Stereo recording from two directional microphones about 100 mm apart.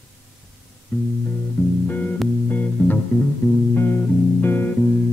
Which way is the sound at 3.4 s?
25° left (ahead or behind).